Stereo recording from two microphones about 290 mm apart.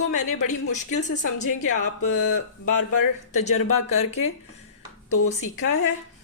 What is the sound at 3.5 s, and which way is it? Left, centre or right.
Speech, left.